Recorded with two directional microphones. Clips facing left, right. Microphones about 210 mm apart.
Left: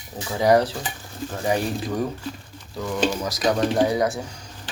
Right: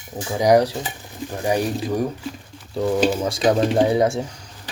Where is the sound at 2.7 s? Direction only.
30° right (ahead or behind).